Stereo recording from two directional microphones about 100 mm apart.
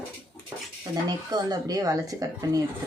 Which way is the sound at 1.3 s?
40° right (ahead or behind).